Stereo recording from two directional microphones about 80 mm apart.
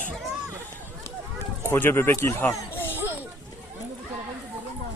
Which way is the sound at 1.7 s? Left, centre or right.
Left.